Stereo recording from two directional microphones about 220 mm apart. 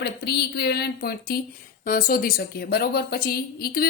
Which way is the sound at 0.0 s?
50° left (ahead or behind).